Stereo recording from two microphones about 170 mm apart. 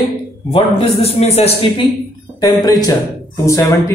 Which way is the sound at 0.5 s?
35° left (ahead or behind).